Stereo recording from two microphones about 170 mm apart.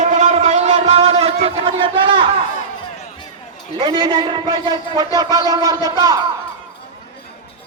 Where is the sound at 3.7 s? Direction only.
25° right (ahead or behind).